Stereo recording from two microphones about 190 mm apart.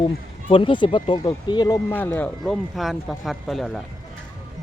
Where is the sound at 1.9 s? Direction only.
10° left (ahead or behind).